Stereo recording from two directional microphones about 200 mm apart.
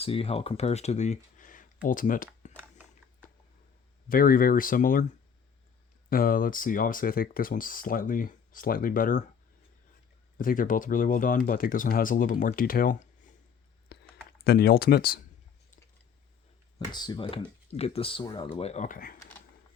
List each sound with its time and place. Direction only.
0.0 s speech: 30° left (ahead or behind)
4.1 s speech: 45° left (ahead or behind)
6.1 s speech: 45° left (ahead or behind)
10.3 s speech: 45° left (ahead or behind)
13.8 s a sound: 55° left (ahead or behind)
14.4 s speech: 50° left (ahead or behind)
16.7 s speech: 20° left (ahead or behind); by 19.1 s 40° left (ahead or behind)